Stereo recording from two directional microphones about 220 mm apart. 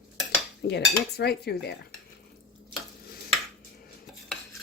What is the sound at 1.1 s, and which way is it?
Speech, 45° left (ahead or behind).